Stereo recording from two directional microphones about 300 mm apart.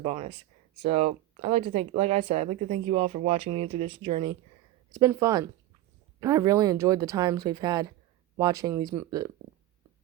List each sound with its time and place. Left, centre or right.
0.0 s speech: centre